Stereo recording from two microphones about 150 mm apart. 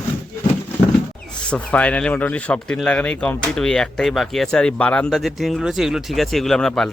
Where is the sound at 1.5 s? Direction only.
10° left (ahead or behind).